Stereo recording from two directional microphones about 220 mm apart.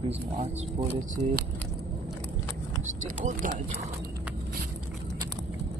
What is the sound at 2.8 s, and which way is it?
Speech, 35° right (ahead or behind).